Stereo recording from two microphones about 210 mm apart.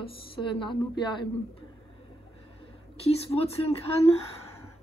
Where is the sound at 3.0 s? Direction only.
30° left (ahead or behind).